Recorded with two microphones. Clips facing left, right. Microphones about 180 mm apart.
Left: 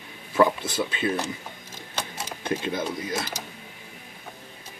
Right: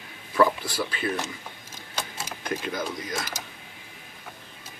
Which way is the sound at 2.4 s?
25° left (ahead or behind).